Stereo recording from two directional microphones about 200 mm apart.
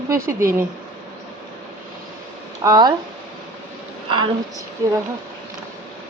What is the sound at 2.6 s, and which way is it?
Speech, 20° right (ahead or behind).